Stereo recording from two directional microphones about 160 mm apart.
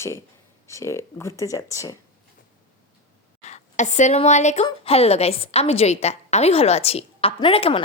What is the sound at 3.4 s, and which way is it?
A woman's voice, 45° left (ahead or behind).